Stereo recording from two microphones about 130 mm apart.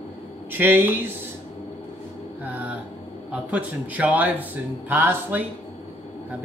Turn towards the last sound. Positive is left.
turn(degrees=-15)  # may be behind; listen again after turning